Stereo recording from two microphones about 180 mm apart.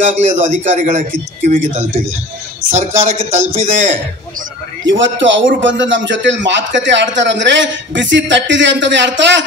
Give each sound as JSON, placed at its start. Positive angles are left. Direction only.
{"t": 0.0, "sound": "a man's voice", "side_deg": -40}
{"t": 4.8, "sound": "a man's voice", "side_deg": -90}